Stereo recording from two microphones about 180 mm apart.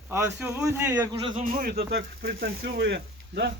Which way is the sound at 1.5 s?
60° right (ahead or behind).